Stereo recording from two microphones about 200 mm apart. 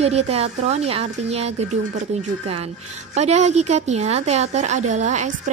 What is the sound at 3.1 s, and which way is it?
A woman's voice, 35° right (ahead or behind).